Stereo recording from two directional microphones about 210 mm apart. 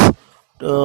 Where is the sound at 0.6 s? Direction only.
40° right (ahead or behind).